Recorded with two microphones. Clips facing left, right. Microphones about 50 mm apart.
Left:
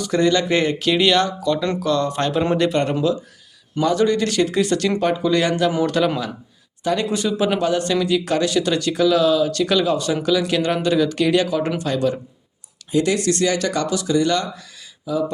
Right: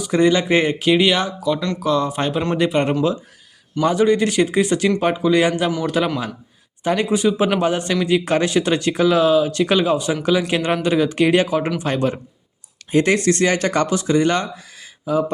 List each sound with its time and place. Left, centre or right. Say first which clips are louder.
0.0 s speech: right 2 dB; centre
3.9 s a man's voice: right 2 dB; centre
6.8 s a man's voice: right 3 dB; right
15.1 s mantra: right 4 dB; right